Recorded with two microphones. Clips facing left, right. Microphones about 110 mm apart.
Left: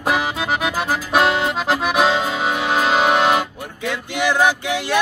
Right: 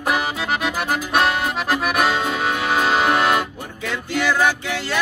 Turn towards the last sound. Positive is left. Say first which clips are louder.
# left 2 dB
turn(degrees=15)  # may be behind; listen again after turning